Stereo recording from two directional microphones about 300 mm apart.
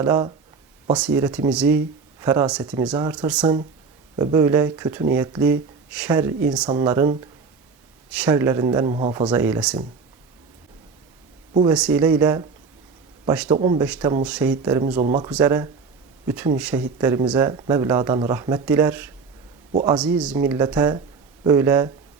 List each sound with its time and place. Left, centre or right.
0.0 s speech: centre
3.4 s speech: centre
11.7 s speech: centre
13.5 s speech: centre
13.8 s speech: centre